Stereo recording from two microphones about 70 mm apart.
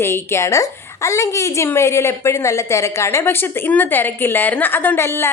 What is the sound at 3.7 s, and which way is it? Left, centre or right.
A woman's voice, left.